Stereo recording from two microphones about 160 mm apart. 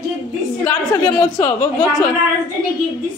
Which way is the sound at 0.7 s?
25° left (ahead or behind).